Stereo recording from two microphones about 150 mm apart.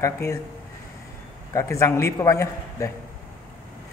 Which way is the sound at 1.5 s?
20° left (ahead or behind).